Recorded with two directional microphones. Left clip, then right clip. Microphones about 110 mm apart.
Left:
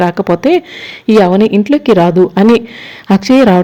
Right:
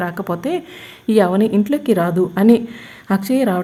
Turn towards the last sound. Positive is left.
turn(degrees=50)  # may be behind; listen again after turning